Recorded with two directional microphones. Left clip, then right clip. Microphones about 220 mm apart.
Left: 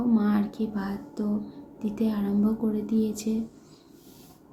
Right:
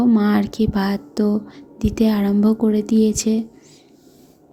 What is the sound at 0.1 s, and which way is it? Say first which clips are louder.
Speech: right 8 dB; 40° right (ahead or behind).